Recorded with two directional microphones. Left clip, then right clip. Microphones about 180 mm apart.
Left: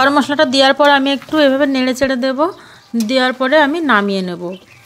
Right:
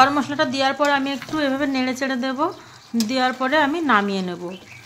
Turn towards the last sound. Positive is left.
turn(degrees=30)  # may be behind; listen again after turning